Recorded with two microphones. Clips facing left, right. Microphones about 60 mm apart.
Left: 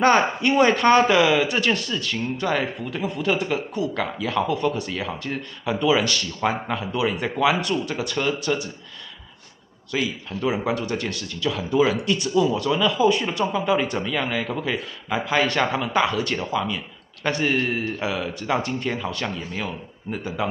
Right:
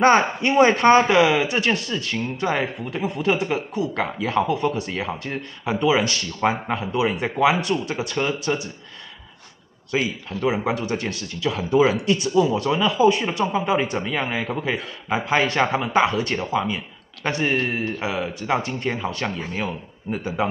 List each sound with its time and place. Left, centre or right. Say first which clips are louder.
0.4 s speech: right 2 dB; centre
9.8 s speech: right 2 dB; right
20.1 s speech: right 3 dB; centre